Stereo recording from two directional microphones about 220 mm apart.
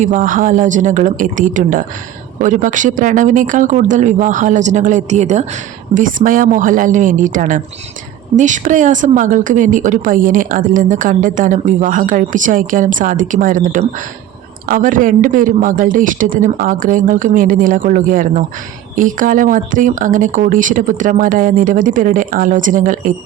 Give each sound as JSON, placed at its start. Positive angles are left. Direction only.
{"t": 0.0, "sound": "speech", "side_deg": -35}